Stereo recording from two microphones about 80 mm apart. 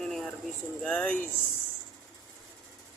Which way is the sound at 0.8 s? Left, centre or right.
Centre.